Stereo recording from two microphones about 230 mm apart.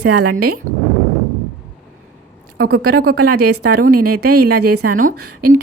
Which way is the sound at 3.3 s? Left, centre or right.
Right.